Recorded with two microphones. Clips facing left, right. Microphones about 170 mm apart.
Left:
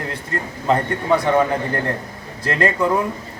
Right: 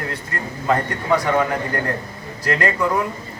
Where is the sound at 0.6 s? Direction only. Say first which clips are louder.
Left 1 dB; 20° left (ahead or behind).